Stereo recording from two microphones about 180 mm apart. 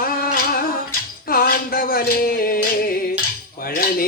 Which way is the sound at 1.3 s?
55° left (ahead or behind).